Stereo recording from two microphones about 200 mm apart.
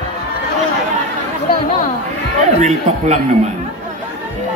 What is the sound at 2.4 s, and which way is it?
Speech, 35° right (ahead or behind).